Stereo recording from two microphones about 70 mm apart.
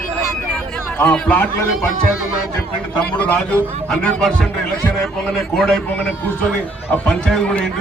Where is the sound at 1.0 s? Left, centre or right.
Centre.